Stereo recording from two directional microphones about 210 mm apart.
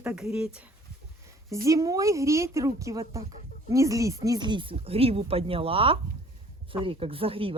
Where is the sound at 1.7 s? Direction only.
15° right (ahead or behind).